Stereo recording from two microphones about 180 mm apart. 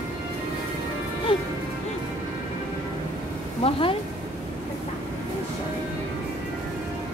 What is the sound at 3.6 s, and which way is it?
Speech, 30° left (ahead or behind).